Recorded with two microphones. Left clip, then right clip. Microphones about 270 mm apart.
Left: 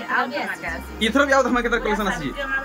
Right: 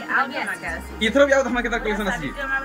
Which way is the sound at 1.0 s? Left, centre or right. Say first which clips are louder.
Right 1 dB; centre.